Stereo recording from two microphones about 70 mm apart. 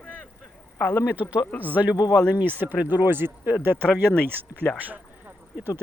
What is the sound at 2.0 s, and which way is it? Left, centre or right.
Speech, left.